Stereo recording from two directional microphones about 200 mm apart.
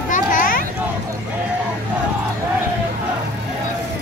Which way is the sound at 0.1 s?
45° left (ahead or behind).